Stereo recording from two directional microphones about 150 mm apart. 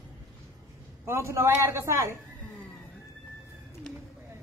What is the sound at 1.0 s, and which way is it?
A man's voice, 20° right (ahead or behind).